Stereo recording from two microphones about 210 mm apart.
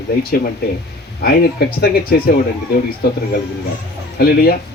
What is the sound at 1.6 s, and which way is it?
Speech, 50° left (ahead or behind).